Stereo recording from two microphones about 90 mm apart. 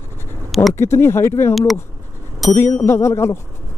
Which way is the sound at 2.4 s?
Centre (ahead or behind).